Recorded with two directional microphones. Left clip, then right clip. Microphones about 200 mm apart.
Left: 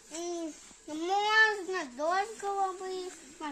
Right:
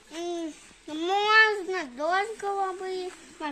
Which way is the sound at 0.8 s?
20° left (ahead or behind).